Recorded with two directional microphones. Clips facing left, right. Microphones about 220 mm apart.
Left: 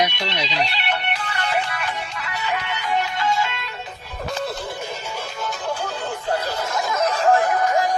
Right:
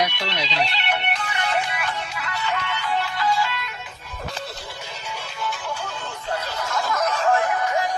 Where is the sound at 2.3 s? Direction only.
15° left (ahead or behind).